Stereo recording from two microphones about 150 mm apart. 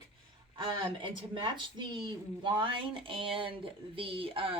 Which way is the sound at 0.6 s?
30° right (ahead or behind).